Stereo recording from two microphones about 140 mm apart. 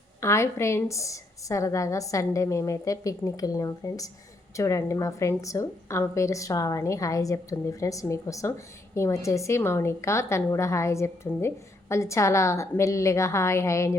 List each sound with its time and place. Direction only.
0.2 s speech: 20° left (ahead or behind)